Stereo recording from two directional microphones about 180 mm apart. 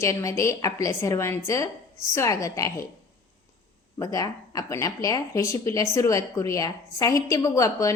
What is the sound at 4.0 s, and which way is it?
A woman's voice, 20° left (ahead or behind).